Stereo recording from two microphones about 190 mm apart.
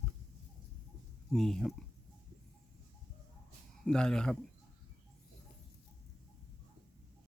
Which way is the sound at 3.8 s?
5° left (ahead or behind).